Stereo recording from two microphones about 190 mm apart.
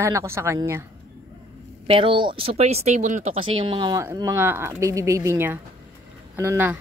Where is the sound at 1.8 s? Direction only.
30° right (ahead or behind).